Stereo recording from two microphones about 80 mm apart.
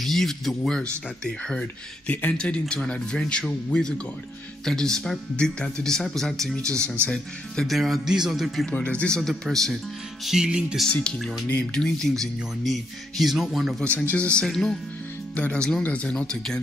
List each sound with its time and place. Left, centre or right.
0.0 s speech: centre
8.7 s speech: centre
10.2 s music: centre
10.9 s speech: centre
13.7 s speech: centre
14.4 s speech: centre
15.3 s speech: centre